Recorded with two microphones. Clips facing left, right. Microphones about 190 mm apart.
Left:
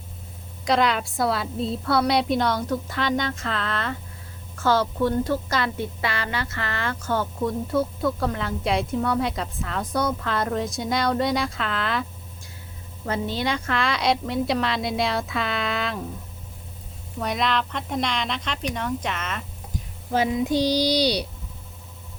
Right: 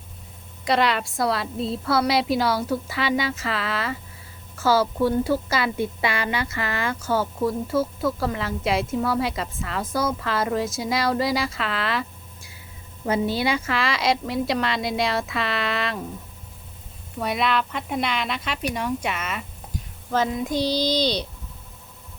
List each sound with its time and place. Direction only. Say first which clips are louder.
0.6 s a woman's voice: even; centre (ahead or behind)
17.2 s a woman's voice: right 1 dB; 5° right (ahead or behind)
20.1 s speech: left 2 dB; 15° left (ahead or behind)